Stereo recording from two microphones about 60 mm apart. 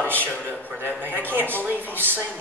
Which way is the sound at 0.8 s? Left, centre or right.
Right.